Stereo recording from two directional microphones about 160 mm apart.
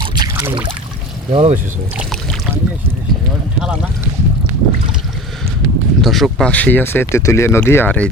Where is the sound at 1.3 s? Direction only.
35° right (ahead or behind).